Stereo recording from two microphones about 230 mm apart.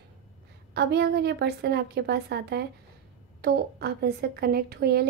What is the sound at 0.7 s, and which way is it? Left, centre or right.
A woman's voice, right.